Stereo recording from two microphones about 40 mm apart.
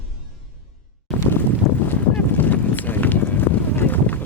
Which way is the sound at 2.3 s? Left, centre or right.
Left.